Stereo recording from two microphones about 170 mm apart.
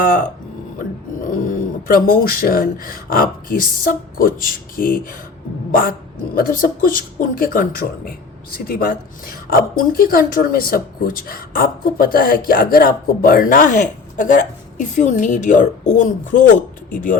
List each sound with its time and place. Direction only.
0.0 s speech: 55° left (ahead or behind)
1.3 s speech: 55° left (ahead or behind)
6.3 s a woman's voice: 55° left (ahead or behind)